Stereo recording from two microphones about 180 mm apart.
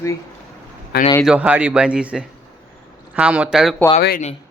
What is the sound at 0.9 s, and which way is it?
Speech, 65° left (ahead or behind).